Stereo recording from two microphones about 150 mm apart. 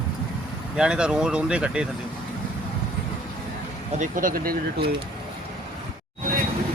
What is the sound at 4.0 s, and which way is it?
Speech, 65° right (ahead or behind).